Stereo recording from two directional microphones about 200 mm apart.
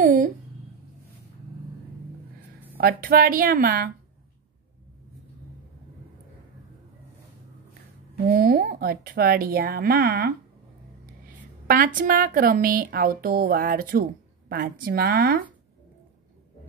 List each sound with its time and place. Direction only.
0.0 s speech: 40° right (ahead or behind)
2.8 s speech: 45° right (ahead or behind)
8.3 s speech: 45° right (ahead or behind)
11.6 s speech: 45° right (ahead or behind)